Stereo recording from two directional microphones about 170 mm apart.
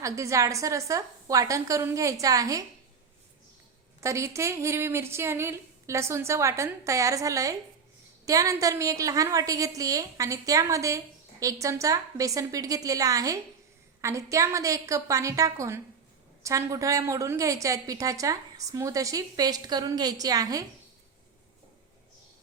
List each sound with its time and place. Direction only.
0.0 s a woman's voice: 20° right (ahead or behind)
4.0 s a woman's voice: 15° right (ahead or behind)